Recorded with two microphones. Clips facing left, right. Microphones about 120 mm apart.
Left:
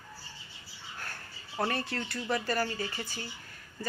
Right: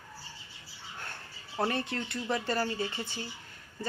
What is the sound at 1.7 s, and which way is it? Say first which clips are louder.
Speech: right 1 dB; 20° right (ahead or behind).